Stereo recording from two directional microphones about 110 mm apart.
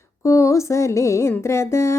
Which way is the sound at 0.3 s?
25° left (ahead or behind).